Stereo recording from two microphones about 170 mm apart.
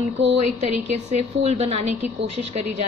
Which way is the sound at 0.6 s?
40° right (ahead or behind).